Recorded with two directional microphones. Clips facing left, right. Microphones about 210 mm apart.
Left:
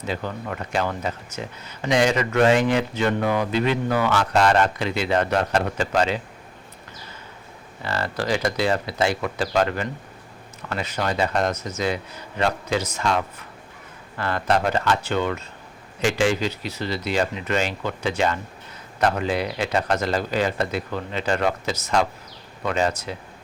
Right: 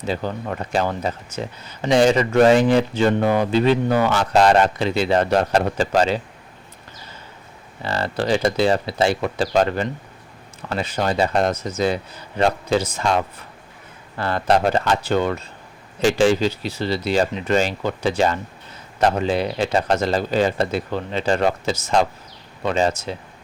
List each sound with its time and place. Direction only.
0.0 s speech: 30° right (ahead or behind)
7.8 s a man's voice: 25° right (ahead or behind)